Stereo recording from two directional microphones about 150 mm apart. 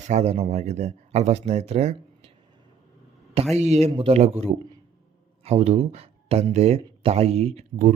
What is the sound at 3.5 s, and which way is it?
Speech, 45° right (ahead or behind).